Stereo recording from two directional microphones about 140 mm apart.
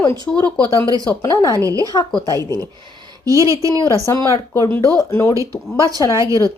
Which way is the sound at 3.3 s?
20° right (ahead or behind).